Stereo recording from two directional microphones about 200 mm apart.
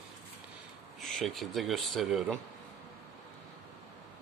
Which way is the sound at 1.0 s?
Centre (ahead or behind).